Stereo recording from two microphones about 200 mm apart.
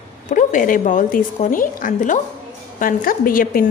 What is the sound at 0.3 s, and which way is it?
A woman's voice, 40° left (ahead or behind).